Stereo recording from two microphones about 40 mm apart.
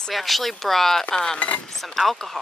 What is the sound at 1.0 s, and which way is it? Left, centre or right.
Speech, left.